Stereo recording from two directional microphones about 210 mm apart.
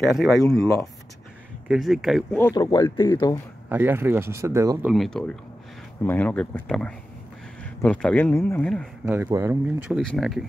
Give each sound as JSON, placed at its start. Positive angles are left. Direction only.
{"t": 0.0, "sound": "speech", "side_deg": 0}
{"t": 1.7, "sound": "speech", "side_deg": 0}
{"t": 2.5, "sound": "speech", "side_deg": 20}
{"t": 3.6, "sound": "speech", "side_deg": -10}
{"t": 4.9, "sound": "speech", "side_deg": 0}
{"t": 9.0, "sound": "speech", "side_deg": -15}